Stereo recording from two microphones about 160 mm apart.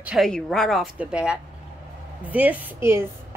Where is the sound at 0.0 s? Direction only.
Centre (ahead or behind).